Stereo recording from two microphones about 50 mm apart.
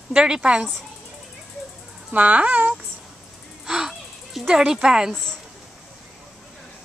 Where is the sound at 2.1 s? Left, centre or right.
Right.